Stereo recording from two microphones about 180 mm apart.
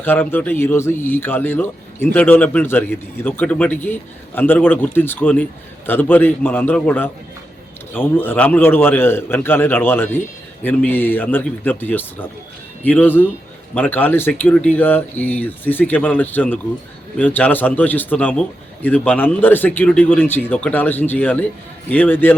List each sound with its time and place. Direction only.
0.0 s a man's voice: 10° left (ahead or behind)